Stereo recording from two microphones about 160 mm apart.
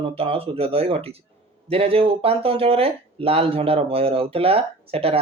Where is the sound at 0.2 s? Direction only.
35° right (ahead or behind).